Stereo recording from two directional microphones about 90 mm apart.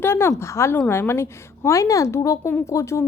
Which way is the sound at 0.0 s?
30° left (ahead or behind).